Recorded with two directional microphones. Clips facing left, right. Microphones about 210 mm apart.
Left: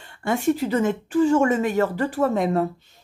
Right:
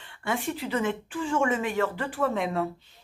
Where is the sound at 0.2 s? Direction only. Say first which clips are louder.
Left 9 dB; 45° left (ahead or behind).